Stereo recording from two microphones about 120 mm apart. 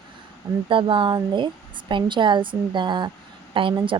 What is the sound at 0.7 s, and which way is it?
A woman's voice, 45° right (ahead or behind).